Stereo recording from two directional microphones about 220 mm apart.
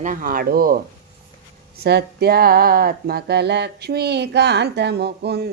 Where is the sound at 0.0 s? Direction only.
35° right (ahead or behind).